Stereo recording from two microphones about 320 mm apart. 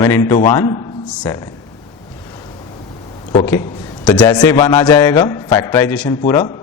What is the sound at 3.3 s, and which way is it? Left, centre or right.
A man's voice, centre.